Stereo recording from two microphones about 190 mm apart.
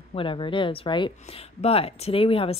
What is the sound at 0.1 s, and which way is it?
A woman's voice, 25° left (ahead or behind).